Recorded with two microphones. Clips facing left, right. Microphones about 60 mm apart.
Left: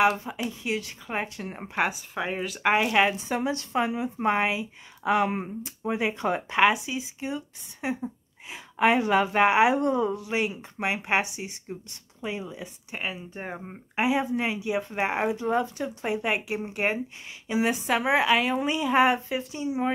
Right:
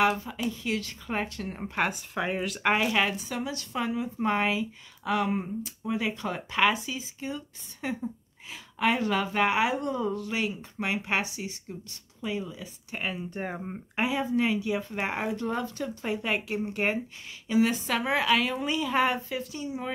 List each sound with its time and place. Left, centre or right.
0.2 s speech: left
1.9 s speech: centre
3.2 s speech: left
12.9 s speech: centre